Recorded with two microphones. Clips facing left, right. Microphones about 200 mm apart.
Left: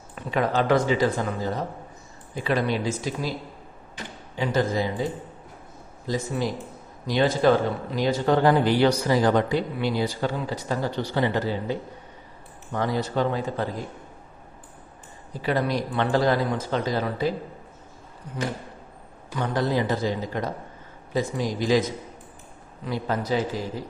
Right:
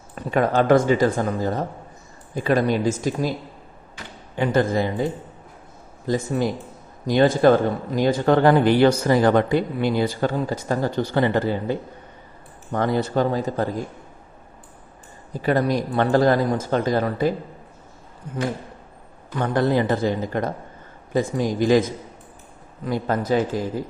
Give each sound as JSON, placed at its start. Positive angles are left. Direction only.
{"t": 0.2, "sound": "speech", "side_deg": -50}
{"t": 4.4, "sound": "speech", "side_deg": -55}
{"t": 6.1, "sound": "speech", "side_deg": -50}
{"t": 15.4, "sound": "speech", "side_deg": -45}
{"t": 19.5, "sound": "speech", "side_deg": -55}
{"t": 22.9, "sound": "speech", "side_deg": -50}